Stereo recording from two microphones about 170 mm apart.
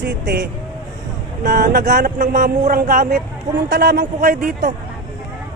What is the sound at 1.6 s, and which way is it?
Speech, 55° right (ahead or behind).